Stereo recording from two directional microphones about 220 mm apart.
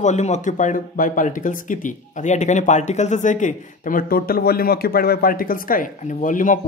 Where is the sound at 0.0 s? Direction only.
30° left (ahead or behind).